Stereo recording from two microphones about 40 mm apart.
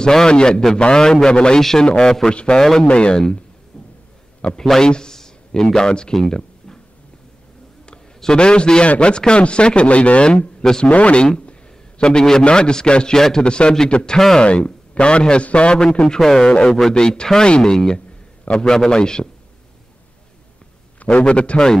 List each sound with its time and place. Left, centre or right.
0.0 s speech: centre
1.6 s speech: centre
1.9 s speech: left
2.9 s speech: left
4.6 s a man's voice: centre
6.2 s a sound: centre
8.2 s speech: centre
10.9 s speech: left
12.0 s speech: centre
14.1 s speech: centre
15.0 s speech: left
16.2 s speech: centre
16.4 s a man's voice: left
21.2 s speech: left